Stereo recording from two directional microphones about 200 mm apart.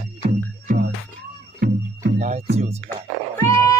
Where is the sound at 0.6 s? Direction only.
50° right (ahead or behind).